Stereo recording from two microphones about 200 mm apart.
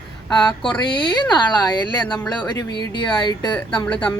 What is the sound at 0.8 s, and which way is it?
A woman's voice, 25° left (ahead or behind).